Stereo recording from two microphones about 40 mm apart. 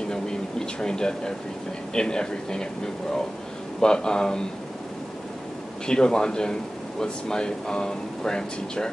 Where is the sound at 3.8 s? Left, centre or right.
Centre.